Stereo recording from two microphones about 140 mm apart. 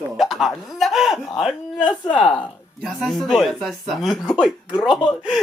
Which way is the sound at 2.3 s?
10° left (ahead or behind).